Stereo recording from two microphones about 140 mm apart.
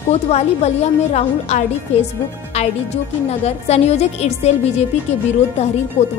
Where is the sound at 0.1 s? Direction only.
50° left (ahead or behind).